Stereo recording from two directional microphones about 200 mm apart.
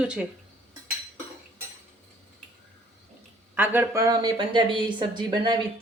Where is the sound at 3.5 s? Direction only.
10° right (ahead or behind).